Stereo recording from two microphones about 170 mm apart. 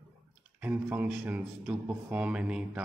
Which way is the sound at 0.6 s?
10° right (ahead or behind).